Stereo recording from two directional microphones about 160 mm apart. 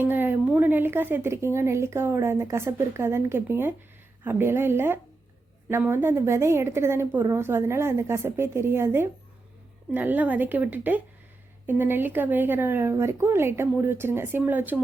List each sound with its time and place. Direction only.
0.0 s a woman's voice: 10° right (ahead or behind)